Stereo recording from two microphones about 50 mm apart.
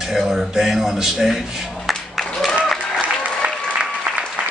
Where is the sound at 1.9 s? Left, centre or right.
Centre.